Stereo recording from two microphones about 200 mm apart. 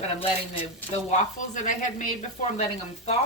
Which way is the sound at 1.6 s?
40° left (ahead or behind).